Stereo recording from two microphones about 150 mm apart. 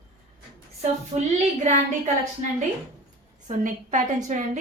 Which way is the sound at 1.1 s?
40° right (ahead or behind).